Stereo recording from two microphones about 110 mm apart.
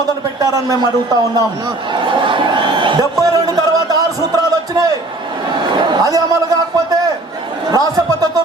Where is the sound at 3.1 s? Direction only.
35° right (ahead or behind).